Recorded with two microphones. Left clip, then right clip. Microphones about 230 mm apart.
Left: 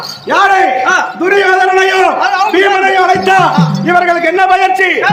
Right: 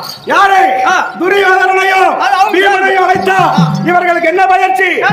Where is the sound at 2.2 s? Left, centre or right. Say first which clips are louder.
Right 2 dB; right.